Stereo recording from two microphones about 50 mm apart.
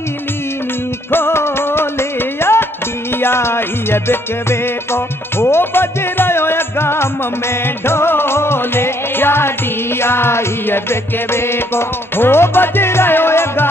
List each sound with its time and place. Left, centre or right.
1.1 s music: left